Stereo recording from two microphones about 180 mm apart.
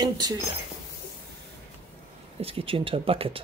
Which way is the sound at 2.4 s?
30° right (ahead or behind).